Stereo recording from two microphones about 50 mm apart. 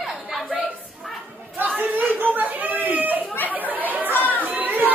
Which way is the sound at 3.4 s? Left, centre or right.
Right.